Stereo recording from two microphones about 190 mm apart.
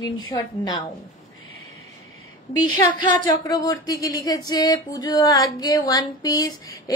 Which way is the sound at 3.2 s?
20° left (ahead or behind).